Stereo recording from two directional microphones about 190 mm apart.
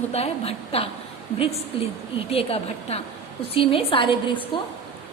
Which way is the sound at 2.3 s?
30° left (ahead or behind).